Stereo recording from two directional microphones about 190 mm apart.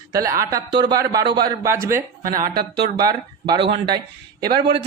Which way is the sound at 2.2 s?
45° right (ahead or behind).